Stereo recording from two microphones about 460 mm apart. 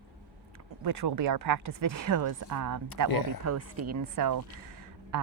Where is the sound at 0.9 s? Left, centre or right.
Right.